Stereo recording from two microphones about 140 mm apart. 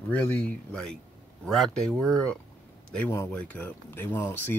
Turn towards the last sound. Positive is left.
turn(degrees=15)  # may be behind; listen again after turning